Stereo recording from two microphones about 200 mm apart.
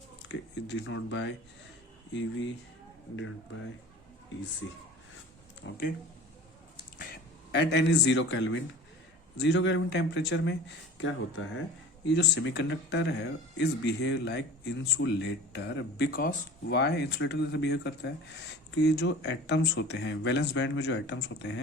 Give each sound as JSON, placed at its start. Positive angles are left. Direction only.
{"t": 0.3, "sound": "speech", "side_deg": 65}
{"t": 7.5, "sound": "speech", "side_deg": 60}